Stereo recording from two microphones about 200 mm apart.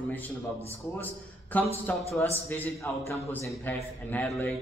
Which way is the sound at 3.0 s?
10° left (ahead or behind).